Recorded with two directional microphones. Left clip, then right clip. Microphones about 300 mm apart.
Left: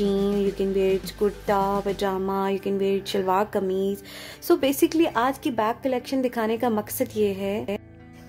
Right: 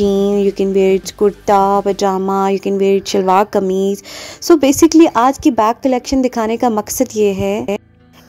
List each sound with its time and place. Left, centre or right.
0.0 s speech: right